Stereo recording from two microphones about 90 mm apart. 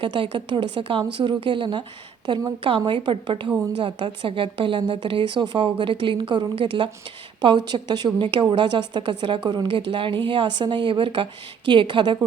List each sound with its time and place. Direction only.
0.0 s a woman's voice: 75° right (ahead or behind)
7.4 s a woman's voice: 55° right (ahead or behind)